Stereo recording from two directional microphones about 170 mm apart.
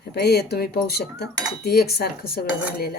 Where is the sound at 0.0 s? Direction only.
70° left (ahead or behind).